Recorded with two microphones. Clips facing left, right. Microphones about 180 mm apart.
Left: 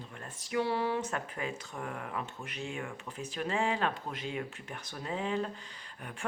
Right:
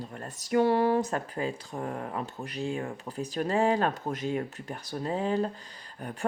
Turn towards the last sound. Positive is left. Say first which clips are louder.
# right 7 dB
turn(degrees=-40)  # may be behind; listen again after turning